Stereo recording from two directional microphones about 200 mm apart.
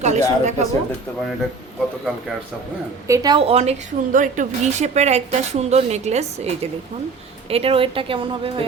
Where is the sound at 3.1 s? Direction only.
20° right (ahead or behind).